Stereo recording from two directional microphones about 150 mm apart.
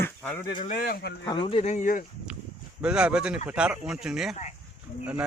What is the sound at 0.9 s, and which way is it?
Speech, 90° left.